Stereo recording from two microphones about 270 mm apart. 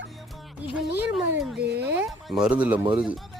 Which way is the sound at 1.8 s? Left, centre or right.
Centre.